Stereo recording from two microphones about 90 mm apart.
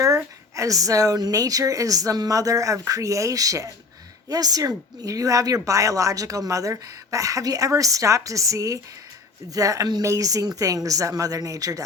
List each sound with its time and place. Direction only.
0.5 s speech: 40° right (ahead or behind)